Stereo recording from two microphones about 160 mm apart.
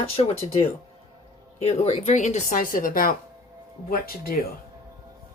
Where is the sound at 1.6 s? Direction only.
40° left (ahead or behind); by 4.4 s 65° left (ahead or behind).